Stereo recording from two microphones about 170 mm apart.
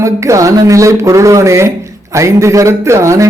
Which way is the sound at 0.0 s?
20° right (ahead or behind).